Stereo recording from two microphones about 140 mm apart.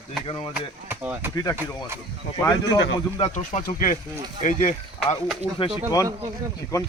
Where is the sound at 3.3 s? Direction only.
60° left (ahead or behind).